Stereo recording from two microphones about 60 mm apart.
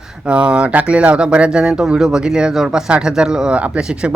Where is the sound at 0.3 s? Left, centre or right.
Centre.